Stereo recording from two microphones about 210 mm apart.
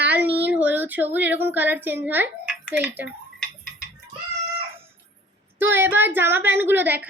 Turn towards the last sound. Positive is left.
turn(degrees=-10)  # may be behind; listen again after turning